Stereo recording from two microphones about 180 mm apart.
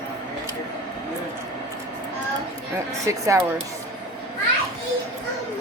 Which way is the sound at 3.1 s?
15° right (ahead or behind).